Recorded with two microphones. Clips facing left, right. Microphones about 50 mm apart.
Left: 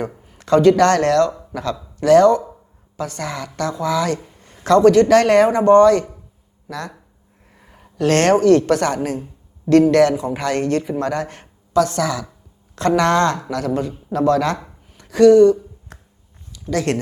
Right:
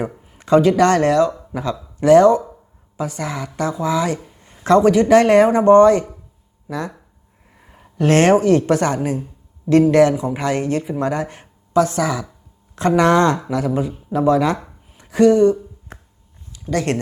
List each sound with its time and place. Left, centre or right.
0.3 s a man's voice: centre
4.2 s a sound: centre
4.6 s a man's voice: centre
7.5 s a sound: centre
8.4 s a man's voice: centre
16.7 s a man's voice: centre